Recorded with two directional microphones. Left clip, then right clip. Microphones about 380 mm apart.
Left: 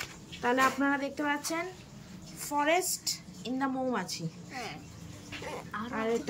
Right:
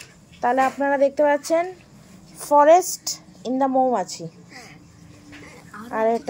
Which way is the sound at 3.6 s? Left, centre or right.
Centre.